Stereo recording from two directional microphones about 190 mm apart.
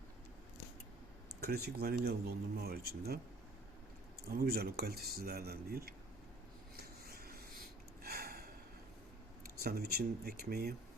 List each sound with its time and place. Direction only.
1.4 s speech: 55° right (ahead or behind)
4.3 s speech: 55° right (ahead or behind)
6.7 s a sound: 55° right (ahead or behind)
8.0 s gasp: 55° right (ahead or behind)
9.6 s speech: 55° right (ahead or behind)